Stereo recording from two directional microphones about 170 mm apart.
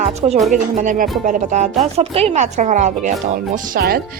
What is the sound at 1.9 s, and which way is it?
Speech, 35° right (ahead or behind).